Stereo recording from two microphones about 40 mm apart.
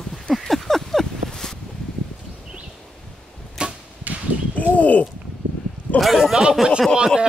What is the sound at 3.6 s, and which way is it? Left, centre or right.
Arrow, right.